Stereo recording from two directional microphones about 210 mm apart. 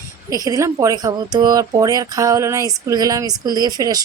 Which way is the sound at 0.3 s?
15° right (ahead or behind).